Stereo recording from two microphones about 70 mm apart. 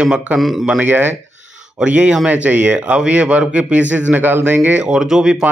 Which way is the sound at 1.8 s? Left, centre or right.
Centre.